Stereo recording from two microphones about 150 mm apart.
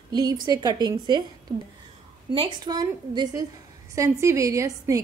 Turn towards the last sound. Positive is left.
turn(degrees=-20)  # may be behind; listen again after turning